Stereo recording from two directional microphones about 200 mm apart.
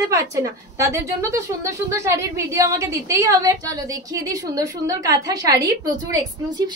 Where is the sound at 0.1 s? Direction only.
15° right (ahead or behind).